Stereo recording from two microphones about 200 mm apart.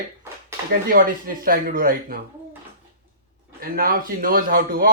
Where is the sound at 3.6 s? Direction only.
45° right (ahead or behind).